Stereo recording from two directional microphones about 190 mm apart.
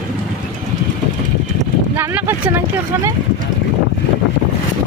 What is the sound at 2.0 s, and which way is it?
Speech, 10° right (ahead or behind).